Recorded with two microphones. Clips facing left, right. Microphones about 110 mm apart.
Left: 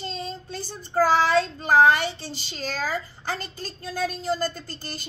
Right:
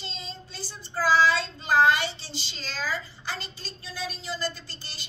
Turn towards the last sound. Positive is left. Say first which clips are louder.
# left 8 dB
turn(degrees=50)  # may be behind; listen again after turning